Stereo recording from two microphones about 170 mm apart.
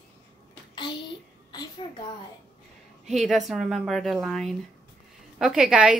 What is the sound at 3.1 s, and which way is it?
Speech, centre (ahead or behind).